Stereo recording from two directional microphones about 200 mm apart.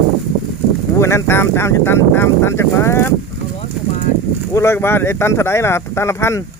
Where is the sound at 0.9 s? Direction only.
15° left (ahead or behind).